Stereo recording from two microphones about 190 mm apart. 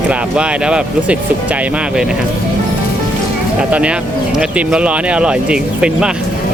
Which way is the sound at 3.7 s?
5° right (ahead or behind).